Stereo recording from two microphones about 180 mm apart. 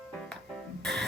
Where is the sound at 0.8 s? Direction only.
5° left (ahead or behind).